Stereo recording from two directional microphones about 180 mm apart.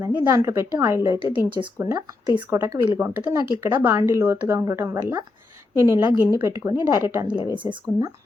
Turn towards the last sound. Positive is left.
turn(degrees=-25)  # may be behind; listen again after turning